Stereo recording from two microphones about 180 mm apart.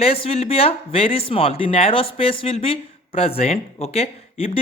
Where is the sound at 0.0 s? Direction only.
30° left (ahead or behind).